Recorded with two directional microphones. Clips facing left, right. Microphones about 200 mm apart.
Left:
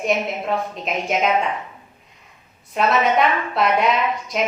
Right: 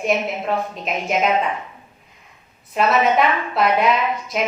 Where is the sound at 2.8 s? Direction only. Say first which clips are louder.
Right 1 dB; centre (ahead or behind).